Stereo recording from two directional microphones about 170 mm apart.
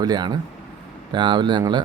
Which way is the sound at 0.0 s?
25° right (ahead or behind).